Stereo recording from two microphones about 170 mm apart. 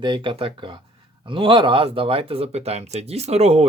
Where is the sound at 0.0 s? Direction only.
30° right (ahead or behind).